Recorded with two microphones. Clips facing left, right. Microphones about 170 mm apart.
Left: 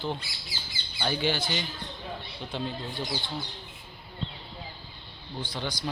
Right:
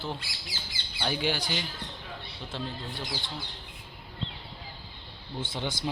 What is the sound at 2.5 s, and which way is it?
Speech, centre (ahead or behind).